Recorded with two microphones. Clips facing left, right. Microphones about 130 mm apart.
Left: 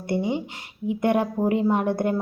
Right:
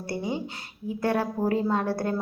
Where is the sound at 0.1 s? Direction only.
20° left (ahead or behind).